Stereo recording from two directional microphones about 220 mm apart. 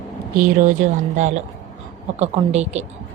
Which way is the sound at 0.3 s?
35° right (ahead or behind).